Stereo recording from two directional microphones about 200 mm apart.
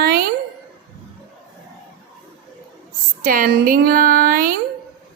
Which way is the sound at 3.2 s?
45° right (ahead or behind).